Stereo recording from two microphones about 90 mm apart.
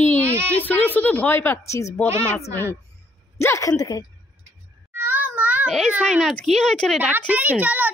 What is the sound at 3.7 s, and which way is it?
Speech, 45° left (ahead or behind).